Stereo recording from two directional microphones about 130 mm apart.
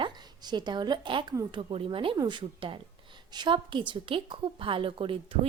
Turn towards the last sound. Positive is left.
turn(degrees=-45)  # may be behind; listen again after turning